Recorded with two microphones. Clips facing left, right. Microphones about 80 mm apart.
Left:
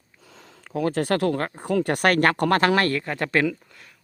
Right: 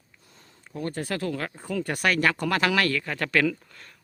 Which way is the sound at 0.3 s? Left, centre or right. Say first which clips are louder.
Left 8 dB; left.